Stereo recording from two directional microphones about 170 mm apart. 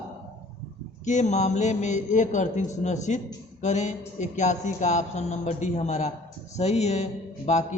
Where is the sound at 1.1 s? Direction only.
45° left (ahead or behind).